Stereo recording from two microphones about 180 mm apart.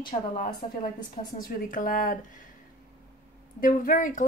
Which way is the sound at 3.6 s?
50° left (ahead or behind).